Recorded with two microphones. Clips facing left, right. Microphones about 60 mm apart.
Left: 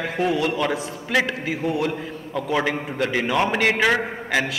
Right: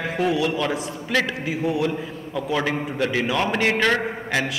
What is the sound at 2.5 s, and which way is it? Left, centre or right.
A man's voice, centre.